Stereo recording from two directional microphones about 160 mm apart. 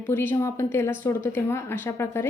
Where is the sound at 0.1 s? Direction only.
15° left (ahead or behind).